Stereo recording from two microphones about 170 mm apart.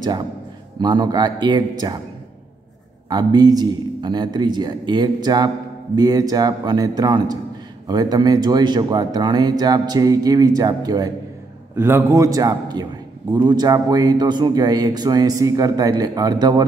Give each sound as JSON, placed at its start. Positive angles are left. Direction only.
{"t": 0.7, "sound": "a man's voice", "side_deg": -25}
{"t": 3.1, "sound": "a man's voice", "side_deg": -25}